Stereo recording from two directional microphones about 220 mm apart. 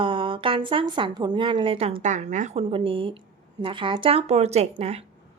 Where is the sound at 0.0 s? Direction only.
25° right (ahead or behind).